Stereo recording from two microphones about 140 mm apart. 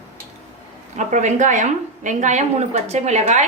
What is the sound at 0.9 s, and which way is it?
A woman's voice, 60° right (ahead or behind).